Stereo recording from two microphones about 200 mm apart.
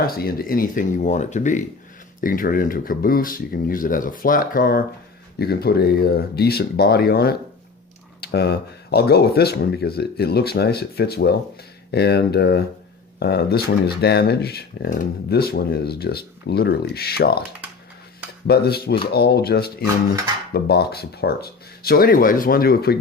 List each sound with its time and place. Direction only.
0.0 s speech: 50° left (ahead or behind)
18.4 s speech: 50° left (ahead or behind)